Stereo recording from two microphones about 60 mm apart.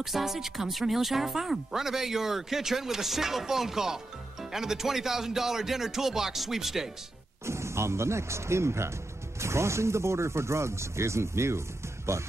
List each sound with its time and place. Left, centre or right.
0.0 s speech: centre
7.4 s speech: right